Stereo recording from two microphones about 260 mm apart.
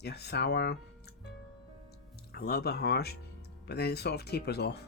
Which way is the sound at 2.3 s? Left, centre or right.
Left.